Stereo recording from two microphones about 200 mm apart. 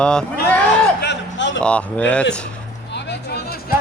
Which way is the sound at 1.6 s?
5° left (ahead or behind).